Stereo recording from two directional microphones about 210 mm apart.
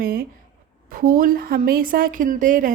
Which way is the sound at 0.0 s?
45° right (ahead or behind).